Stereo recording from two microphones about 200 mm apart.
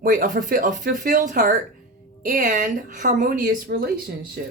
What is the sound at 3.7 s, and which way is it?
Speech, 50° right (ahead or behind).